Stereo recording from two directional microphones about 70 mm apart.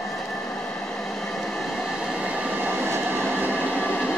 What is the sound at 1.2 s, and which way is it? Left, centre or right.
Train, centre.